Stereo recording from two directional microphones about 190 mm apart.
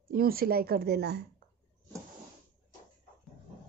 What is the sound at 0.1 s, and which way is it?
Speech, 50° right (ahead or behind).